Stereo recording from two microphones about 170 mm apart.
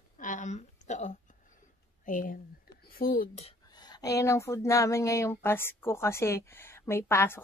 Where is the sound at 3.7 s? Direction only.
25° left (ahead or behind).